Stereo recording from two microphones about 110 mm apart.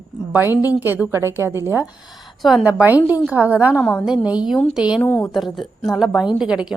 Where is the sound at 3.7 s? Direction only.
15° left (ahead or behind).